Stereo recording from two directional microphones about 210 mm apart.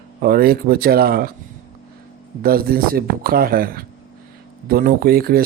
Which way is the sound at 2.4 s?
45° right (ahead or behind).